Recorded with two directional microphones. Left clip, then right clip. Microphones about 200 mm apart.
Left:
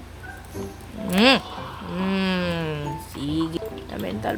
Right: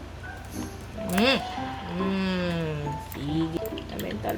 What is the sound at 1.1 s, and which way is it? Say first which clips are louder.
Speech: left 6 dB; 40° left (ahead or behind).